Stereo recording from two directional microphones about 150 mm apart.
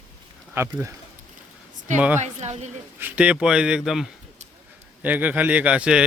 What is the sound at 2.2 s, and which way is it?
Speech, 50° right (ahead or behind).